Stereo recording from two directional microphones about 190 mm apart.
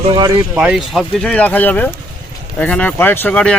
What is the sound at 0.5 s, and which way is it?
Speech, 5° right (ahead or behind).